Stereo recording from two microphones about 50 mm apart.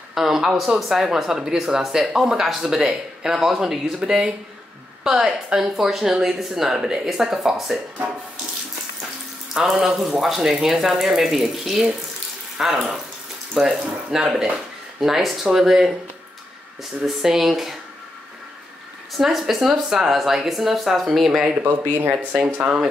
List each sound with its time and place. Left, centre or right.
0.1 s speech: centre
9.5 s speech: centre
17.0 s speech: centre
19.1 s speech: centre